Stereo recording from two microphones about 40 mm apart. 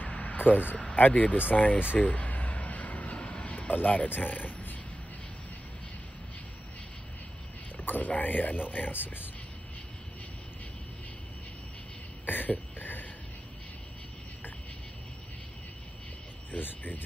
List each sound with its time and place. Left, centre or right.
0.1 s a sound: left
0.7 s speech: left
2.0 s vehicle: left
3.5 s speech: left
7.7 s speech: left
12.3 s a sound: left
16.5 s speech: left